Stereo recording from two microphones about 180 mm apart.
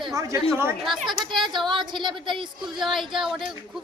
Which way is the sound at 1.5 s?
25° right (ahead or behind).